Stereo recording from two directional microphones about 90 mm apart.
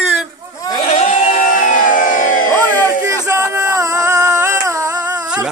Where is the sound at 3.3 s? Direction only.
35° right (ahead or behind).